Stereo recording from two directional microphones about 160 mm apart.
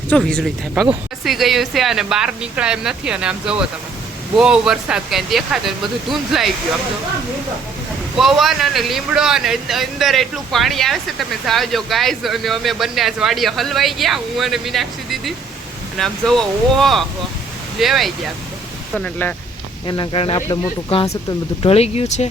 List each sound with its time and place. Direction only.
0.2 s a man's voice: centre (ahead or behind)
8.1 s a man's voice: centre (ahead or behind)
19.9 s speech: 30° left (ahead or behind)